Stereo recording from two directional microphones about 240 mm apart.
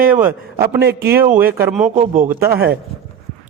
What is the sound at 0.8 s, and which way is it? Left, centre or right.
Speech, right.